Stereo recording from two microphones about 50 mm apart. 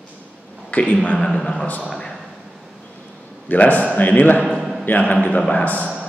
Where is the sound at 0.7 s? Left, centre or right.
Left.